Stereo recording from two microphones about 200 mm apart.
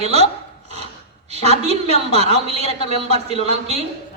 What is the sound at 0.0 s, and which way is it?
Speech, 30° right (ahead or behind).